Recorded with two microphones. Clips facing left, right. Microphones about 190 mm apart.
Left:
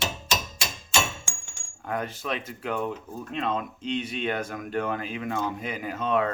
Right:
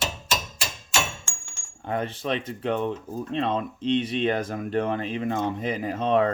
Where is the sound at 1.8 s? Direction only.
30° right (ahead or behind).